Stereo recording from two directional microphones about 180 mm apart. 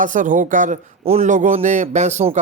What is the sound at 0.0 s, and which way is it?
Speech, 45° right (ahead or behind).